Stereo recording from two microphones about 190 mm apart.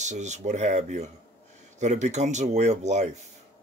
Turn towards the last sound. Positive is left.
turn(degrees=-40)  # may be behind; listen again after turning